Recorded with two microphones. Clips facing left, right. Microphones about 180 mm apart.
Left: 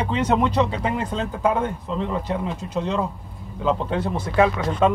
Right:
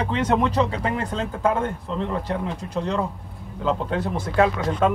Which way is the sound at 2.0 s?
15° left (ahead or behind).